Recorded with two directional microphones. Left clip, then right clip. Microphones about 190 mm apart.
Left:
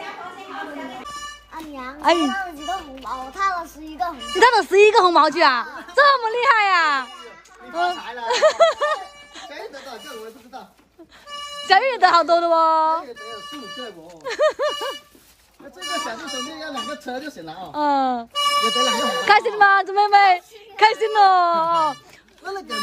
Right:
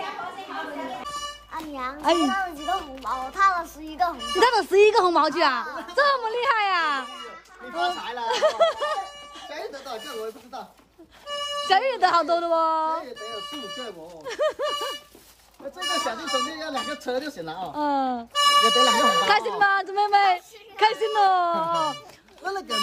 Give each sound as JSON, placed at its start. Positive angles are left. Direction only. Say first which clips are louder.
{"t": 1.5, "sound": "a child's voice", "louder": "right 4 dB", "side_deg": -5}
{"t": 11.6, "sound": "a woman's voice", "louder": "left 5 dB", "side_deg": -10}
{"t": 14.2, "sound": "a woman's voice", "louder": "left 6 dB", "side_deg": -10}
{"t": 16.0, "sound": "a woman's voice", "louder": "right 2 dB", "side_deg": 0}
{"t": 22.4, "sound": "speech", "louder": "even", "side_deg": -20}